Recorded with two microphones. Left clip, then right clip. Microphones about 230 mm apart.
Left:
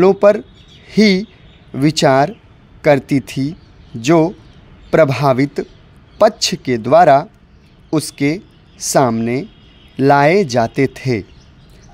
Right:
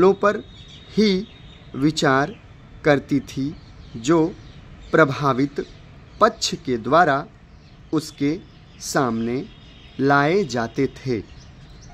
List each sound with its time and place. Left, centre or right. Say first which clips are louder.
0.0 s speech: left 7 dB; left